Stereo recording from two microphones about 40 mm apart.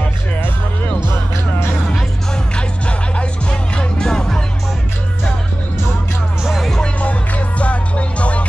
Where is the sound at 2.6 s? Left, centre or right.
Left.